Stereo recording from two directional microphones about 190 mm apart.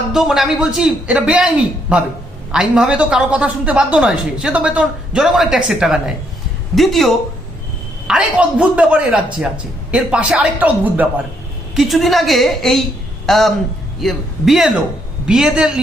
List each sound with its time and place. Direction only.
0.1 s a woman's voice: centre (ahead or behind)